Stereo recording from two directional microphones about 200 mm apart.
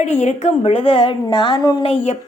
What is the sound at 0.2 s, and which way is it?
A woman's voice, 35° left (ahead or behind).